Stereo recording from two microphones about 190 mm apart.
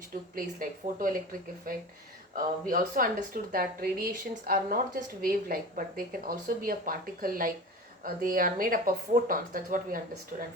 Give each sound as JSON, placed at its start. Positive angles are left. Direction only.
{"t": 0.3, "sound": "speech", "side_deg": -45}